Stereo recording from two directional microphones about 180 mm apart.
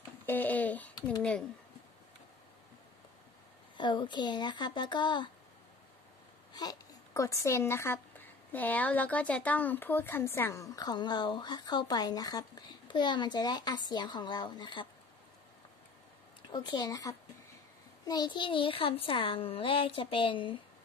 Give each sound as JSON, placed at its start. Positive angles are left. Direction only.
{"t": 0.3, "sound": "speech", "side_deg": 10}
{"t": 3.7, "sound": "speech", "side_deg": 25}
{"t": 6.5, "sound": "speech", "side_deg": 20}
{"t": 16.5, "sound": "speech", "side_deg": 25}